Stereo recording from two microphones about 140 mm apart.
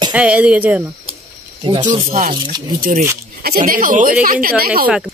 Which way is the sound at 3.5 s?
80° right.